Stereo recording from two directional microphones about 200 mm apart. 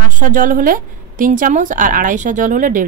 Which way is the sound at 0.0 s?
40° right (ahead or behind).